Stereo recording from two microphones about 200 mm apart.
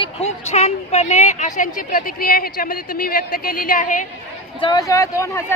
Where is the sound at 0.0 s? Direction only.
30° left (ahead or behind).